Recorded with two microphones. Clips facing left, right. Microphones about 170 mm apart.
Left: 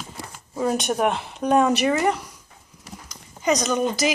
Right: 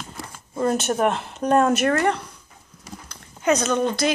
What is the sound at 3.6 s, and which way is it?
Speech, 5° left (ahead or behind).